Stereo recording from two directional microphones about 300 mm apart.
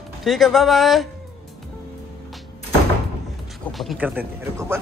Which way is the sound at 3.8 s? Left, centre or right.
Centre.